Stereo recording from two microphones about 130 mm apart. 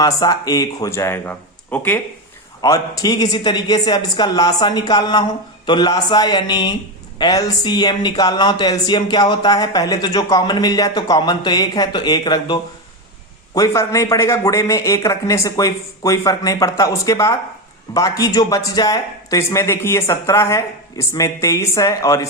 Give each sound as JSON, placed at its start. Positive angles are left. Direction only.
{"t": 0.0, "sound": "speech", "side_deg": 30}
{"t": 2.6, "sound": "speech", "side_deg": 30}